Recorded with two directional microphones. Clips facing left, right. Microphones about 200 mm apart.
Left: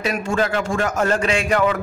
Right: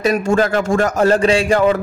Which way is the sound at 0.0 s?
40° right (ahead or behind).